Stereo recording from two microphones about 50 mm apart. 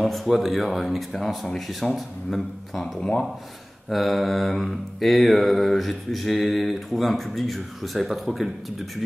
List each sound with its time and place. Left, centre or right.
0.0 s mantra: centre
3.0 s speech: centre
3.9 s mantra: centre